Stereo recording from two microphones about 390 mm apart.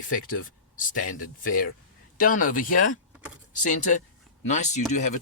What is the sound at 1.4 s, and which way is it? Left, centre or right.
Speech, left.